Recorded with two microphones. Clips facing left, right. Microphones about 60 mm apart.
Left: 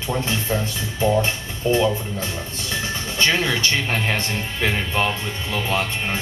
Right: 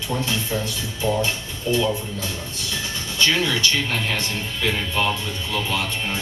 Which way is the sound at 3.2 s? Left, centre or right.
Left.